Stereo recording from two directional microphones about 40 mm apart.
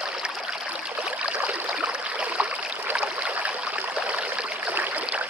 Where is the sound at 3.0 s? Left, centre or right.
Right.